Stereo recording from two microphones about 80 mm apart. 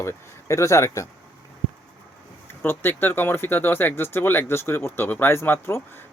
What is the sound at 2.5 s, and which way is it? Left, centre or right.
Speech, left.